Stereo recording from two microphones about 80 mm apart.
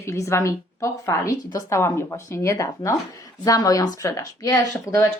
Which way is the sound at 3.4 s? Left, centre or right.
Left.